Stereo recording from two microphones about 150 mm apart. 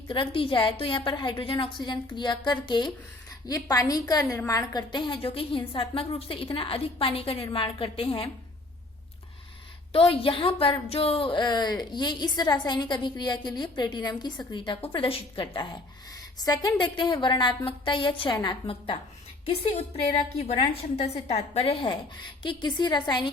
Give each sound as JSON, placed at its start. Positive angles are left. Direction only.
{"t": 0.1, "sound": "a woman's voice", "side_deg": 35}
{"t": 9.9, "sound": "a woman's voice", "side_deg": 40}
{"t": 20.1, "sound": "a woman's voice", "side_deg": 40}